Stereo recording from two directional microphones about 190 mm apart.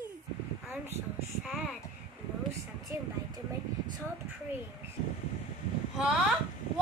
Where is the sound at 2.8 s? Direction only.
20° right (ahead or behind).